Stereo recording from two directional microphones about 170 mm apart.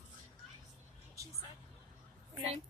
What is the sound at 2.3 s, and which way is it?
Speech, 30° right (ahead or behind).